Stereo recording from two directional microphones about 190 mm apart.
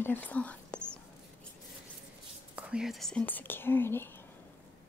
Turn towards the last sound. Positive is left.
turn(degrees=10)  # may be behind; listen again after turning